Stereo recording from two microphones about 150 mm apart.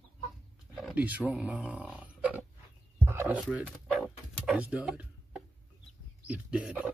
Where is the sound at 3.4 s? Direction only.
5° right (ahead or behind).